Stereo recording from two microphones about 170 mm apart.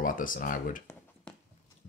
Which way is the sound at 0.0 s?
55° left (ahead or behind).